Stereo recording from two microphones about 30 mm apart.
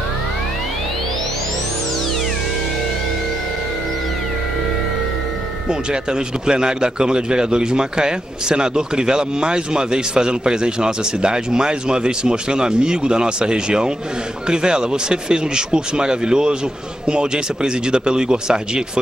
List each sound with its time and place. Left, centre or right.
5.7 s a man's voice: right